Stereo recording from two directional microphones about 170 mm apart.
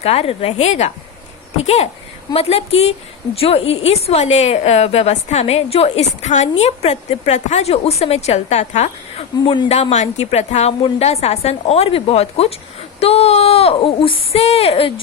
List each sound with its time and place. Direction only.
0.0 s a woman's voice: 35° left (ahead or behind)